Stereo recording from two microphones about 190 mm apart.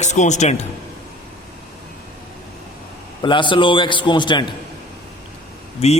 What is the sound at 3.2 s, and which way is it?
A man's voice, 25° left (ahead or behind).